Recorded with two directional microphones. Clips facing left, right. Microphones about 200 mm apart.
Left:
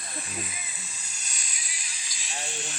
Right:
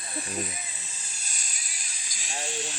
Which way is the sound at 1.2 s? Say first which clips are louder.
Left 1 dB; 45° right (ahead or behind).